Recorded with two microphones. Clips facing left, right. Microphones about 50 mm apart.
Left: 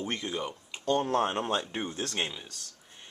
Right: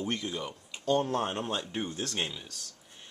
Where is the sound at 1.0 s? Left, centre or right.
Centre.